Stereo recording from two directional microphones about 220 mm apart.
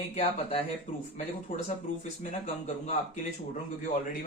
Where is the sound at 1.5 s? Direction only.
40° left (ahead or behind).